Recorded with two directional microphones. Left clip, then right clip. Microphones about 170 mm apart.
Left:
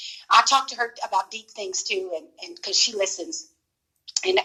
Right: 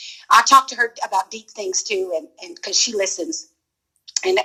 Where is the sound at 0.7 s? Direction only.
35° right (ahead or behind).